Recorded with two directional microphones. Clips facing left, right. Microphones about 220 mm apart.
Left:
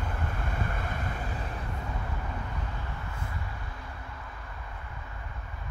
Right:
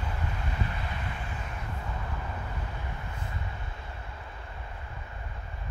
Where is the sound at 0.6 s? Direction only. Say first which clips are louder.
Left 1 dB; 50° left (ahead or behind).